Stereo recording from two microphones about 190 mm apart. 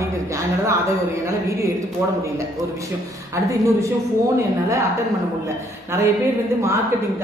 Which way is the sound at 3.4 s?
15° right (ahead or behind).